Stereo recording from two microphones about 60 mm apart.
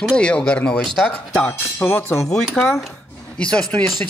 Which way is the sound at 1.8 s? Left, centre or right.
Left.